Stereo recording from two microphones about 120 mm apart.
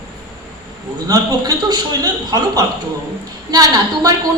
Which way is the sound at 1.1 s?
30° right (ahead or behind).